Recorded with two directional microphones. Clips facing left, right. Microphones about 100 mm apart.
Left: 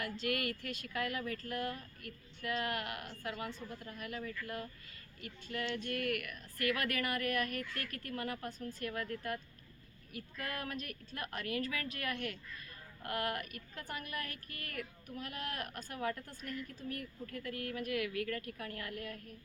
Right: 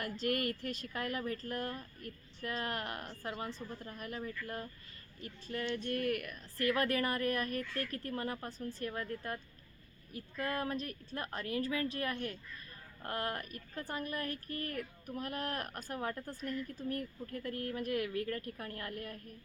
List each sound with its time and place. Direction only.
0.0 s speech: 40° right (ahead or behind)